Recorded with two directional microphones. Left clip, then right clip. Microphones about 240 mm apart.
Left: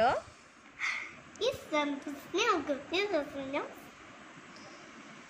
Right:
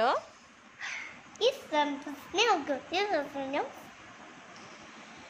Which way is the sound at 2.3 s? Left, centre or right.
Right.